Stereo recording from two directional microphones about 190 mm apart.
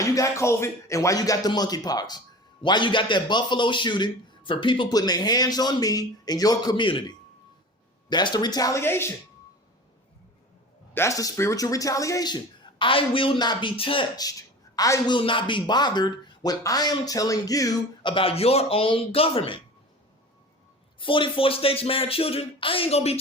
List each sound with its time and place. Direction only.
0.0 s a man's voice: 15° left (ahead or behind)
8.1 s a man's voice: 25° left (ahead or behind)
10.9 s a man's voice: 15° left (ahead or behind)
21.0 s a man's voice: 25° left (ahead or behind)